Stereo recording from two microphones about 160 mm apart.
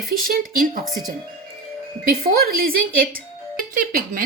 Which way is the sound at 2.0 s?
65° right (ahead or behind).